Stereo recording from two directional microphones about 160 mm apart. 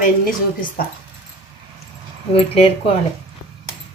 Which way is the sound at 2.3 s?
40° left (ahead or behind).